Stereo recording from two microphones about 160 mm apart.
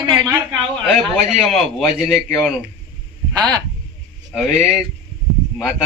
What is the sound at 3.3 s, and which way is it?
Speech, 25° right (ahead or behind).